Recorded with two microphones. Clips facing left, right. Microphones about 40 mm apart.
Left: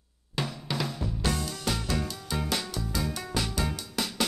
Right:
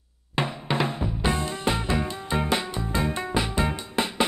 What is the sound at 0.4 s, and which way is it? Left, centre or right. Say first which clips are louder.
Music: right 6 dB; right.